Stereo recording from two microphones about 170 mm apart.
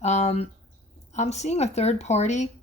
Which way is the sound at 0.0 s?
40° left (ahead or behind).